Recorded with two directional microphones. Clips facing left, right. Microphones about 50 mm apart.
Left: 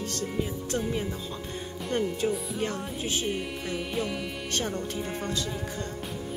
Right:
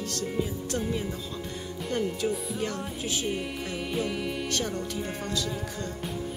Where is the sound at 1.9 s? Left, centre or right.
Left.